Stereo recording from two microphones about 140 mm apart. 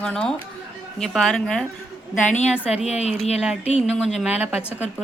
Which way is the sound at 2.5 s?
5° right (ahead or behind).